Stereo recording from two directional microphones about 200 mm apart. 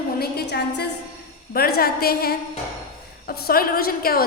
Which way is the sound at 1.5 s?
50° left (ahead or behind).